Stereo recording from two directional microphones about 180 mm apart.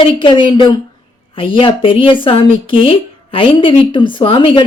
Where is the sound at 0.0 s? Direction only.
30° left (ahead or behind).